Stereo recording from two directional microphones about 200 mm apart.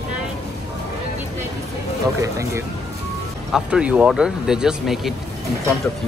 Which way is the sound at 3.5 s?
5° right (ahead or behind).